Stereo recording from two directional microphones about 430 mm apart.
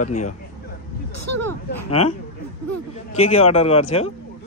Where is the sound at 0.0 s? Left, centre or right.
Centre.